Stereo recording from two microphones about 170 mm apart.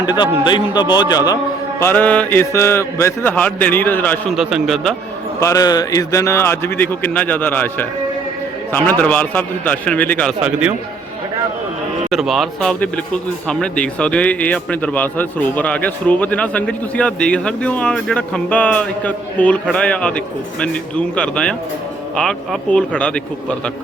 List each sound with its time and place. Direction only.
0.0 s a man's voice: 25° left (ahead or behind)
1.8 s speech: 10° left (ahead or behind)
4.4 s speech: centre (ahead or behind)
5.4 s speech: 20° left (ahead or behind)
10.4 s a man's voice: 5° right (ahead or behind)
12.1 s speech: centre (ahead or behind)